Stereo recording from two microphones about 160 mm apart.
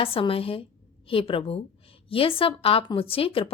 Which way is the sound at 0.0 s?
35° left (ahead or behind).